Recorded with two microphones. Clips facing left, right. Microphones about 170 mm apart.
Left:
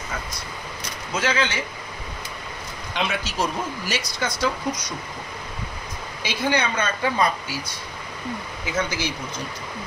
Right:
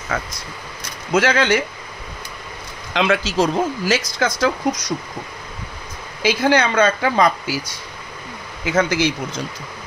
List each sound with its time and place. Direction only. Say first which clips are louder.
0.1 s speech: right 9 dB; 90° right
1.1 s a man's voice: right 8 dB; 75° right (ahead or behind)
2.9 s speech: right 8 dB; 90° right
6.2 s speech: right 7 dB; 90° right